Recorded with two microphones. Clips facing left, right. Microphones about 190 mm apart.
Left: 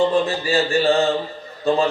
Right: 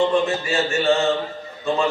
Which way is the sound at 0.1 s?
35° left (ahead or behind).